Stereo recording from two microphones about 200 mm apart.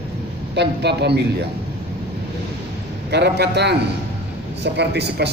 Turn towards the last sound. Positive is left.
turn(degrees=-55)  # may be behind; listen again after turning